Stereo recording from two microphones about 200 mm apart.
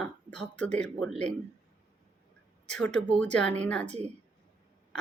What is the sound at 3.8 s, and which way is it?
Speech, 35° right (ahead or behind).